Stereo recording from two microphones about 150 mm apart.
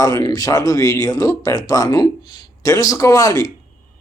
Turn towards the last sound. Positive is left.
turn(degrees=25)  # may be behind; listen again after turning